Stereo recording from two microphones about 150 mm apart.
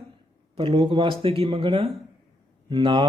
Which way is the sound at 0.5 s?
35° right (ahead or behind).